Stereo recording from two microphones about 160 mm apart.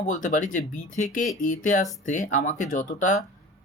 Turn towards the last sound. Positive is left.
turn(degrees=55)  # may be behind; listen again after turning